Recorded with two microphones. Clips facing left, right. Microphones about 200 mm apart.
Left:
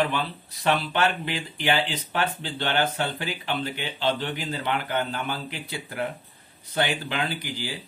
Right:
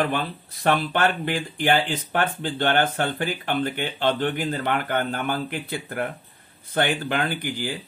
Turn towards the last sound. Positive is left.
turn(degrees=-55)  # may be behind; listen again after turning